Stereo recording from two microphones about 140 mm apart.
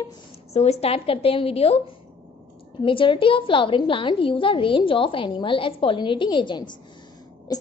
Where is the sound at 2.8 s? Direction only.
40° left (ahead or behind).